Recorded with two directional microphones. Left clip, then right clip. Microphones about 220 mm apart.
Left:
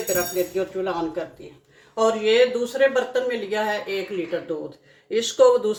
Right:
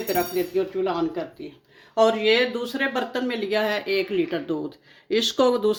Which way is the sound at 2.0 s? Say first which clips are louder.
Left 1 dB; 45° right (ahead or behind).